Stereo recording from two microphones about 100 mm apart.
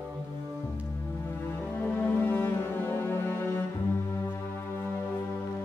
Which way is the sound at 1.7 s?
15° left (ahead or behind).